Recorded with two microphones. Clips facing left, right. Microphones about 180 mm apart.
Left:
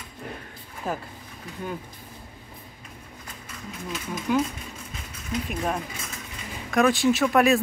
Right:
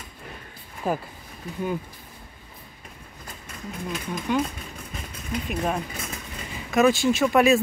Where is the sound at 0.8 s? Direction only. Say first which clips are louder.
Right 4 dB; 10° right (ahead or behind).